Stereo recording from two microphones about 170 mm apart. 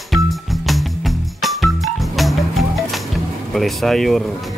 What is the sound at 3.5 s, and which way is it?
Speech, centre (ahead or behind).